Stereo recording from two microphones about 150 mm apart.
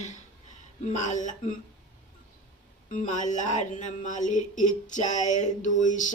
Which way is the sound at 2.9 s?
55° left (ahead or behind).